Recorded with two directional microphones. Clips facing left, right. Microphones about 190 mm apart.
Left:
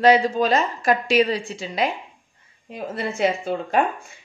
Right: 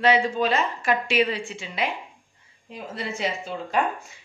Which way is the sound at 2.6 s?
50° left (ahead or behind).